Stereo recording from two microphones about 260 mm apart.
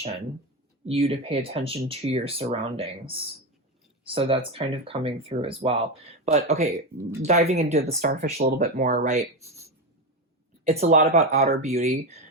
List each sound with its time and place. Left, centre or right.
0.9 s speech: right
10.6 s speech: right